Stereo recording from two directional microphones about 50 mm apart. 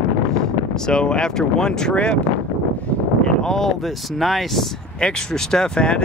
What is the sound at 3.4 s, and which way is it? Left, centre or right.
Speech, centre.